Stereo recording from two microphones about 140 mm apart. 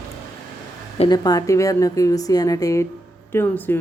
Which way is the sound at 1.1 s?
25° left (ahead or behind).